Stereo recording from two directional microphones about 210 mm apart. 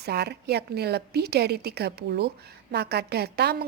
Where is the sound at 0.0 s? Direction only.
50° right (ahead or behind).